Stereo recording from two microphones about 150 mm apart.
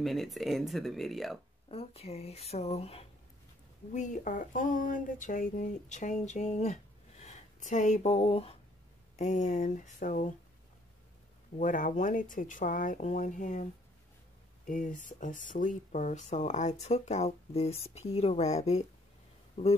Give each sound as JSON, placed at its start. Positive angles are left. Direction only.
{"t": 0.0, "sound": "speech", "side_deg": 0}
{"t": 1.7, "sound": "speech", "side_deg": 40}
{"t": 3.9, "sound": "speech", "side_deg": 55}
{"t": 9.2, "sound": "speech", "side_deg": 55}
{"t": 11.5, "sound": "speech", "side_deg": 60}
{"t": 14.7, "sound": "speech", "side_deg": 60}